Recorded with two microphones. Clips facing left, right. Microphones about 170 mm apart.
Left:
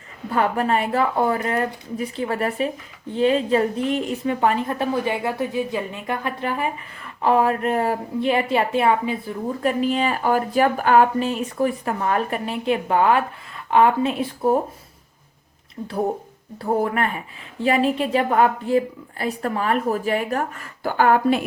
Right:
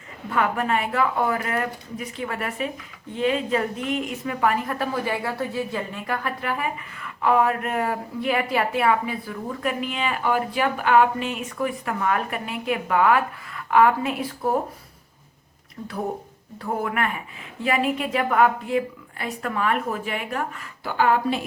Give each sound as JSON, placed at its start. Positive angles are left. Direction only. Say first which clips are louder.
{"t": 0.3, "sound": "a woman's voice", "louder": "left 3 dB", "side_deg": 35}
{"t": 9.8, "sound": "speech", "louder": "left 5 dB", "side_deg": 35}
{"t": 15.8, "sound": "a woman's voice", "louder": "left 5 dB", "side_deg": 25}